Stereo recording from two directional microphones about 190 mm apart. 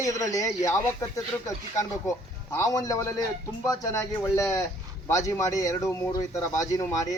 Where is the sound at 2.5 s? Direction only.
20° left (ahead or behind).